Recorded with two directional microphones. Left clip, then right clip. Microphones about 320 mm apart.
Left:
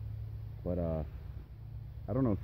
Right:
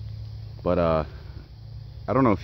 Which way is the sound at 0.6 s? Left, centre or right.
Centre.